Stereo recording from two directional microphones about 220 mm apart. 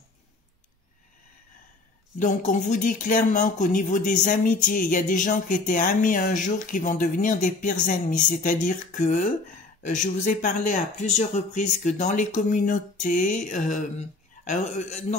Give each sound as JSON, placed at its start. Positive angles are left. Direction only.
{"t": 2.1, "sound": "speech", "side_deg": 35}